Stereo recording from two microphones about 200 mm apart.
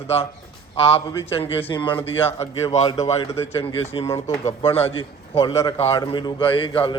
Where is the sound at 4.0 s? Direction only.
15° left (ahead or behind).